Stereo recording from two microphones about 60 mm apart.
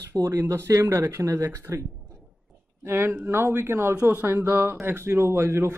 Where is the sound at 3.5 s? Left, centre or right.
Right.